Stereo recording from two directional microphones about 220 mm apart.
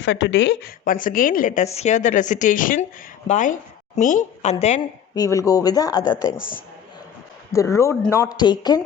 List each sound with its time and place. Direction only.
0.0 s speech: 55° left (ahead or behind)
0.9 s a woman's voice: 40° left (ahead or behind)
5.1 s speech: 15° left (ahead or behind)
7.5 s speech: 15° left (ahead or behind)